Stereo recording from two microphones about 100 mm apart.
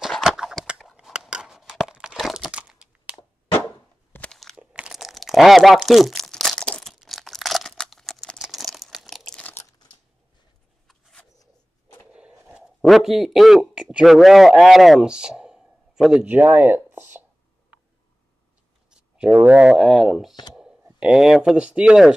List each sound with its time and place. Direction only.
0.0 s a sound: 5° right (ahead or behind)
1.9 s crumpling: 5° right (ahead or behind)
4.1 s crunch: 10° left (ahead or behind)
4.6 s crunch: 10° right (ahead or behind)
10.9 s a sound: 5° left (ahead or behind)
12.1 s a sound: 10° right (ahead or behind)
12.8 s a man's voice: centre (ahead or behind)
16.3 s speech: 15° right (ahead or behind)
18.9 s speech: 10° right (ahead or behind)